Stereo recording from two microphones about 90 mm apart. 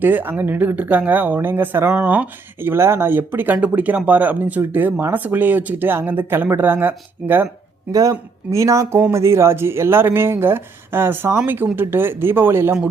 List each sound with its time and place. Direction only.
0.0 s speech: 20° right (ahead or behind)
8.4 s speech: 35° right (ahead or behind)